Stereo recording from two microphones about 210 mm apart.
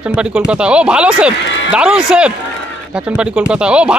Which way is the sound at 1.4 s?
60° left (ahead or behind).